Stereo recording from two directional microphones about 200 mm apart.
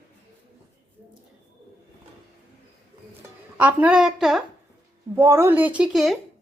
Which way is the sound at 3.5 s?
5° right (ahead or behind).